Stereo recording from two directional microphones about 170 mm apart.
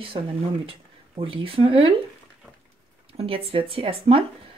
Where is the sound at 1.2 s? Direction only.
30° right (ahead or behind).